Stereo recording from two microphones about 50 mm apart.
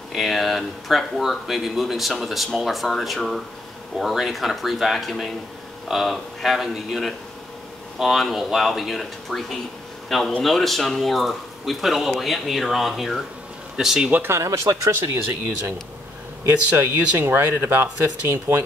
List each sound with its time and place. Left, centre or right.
0.1 s speech: centre
14.2 s speech: right
16.4 s speech: right